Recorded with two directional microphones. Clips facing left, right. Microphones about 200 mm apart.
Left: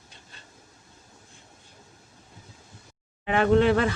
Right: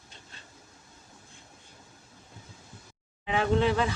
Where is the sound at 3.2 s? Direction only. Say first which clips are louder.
Left 5 dB; 60° left (ahead or behind).